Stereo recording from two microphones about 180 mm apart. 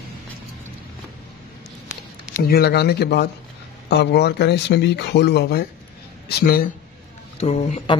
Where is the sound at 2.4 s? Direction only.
60° left (ahead or behind).